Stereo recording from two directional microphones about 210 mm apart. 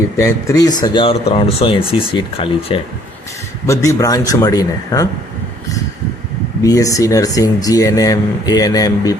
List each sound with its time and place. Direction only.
0.5 s speech: 20° left (ahead or behind)
3.7 s speech: 15° left (ahead or behind)
6.6 s speech: 15° left (ahead or behind)